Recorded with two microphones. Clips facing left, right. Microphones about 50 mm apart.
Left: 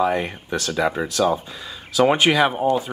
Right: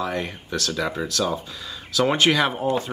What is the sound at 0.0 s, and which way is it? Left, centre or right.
Speech, left.